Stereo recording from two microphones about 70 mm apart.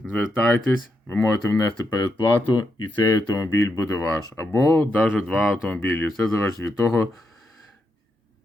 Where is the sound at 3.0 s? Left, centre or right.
Left.